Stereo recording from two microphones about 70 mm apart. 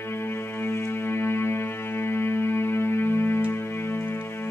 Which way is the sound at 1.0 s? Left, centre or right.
Left.